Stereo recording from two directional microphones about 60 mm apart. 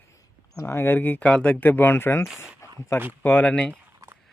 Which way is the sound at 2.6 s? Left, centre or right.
Left.